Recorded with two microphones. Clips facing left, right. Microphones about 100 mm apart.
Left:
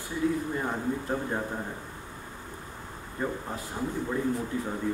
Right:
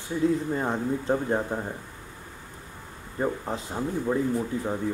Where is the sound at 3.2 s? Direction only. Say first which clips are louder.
Right 4 dB; 20° right (ahead or behind).